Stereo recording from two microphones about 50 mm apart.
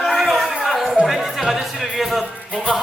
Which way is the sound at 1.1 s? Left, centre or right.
Centre.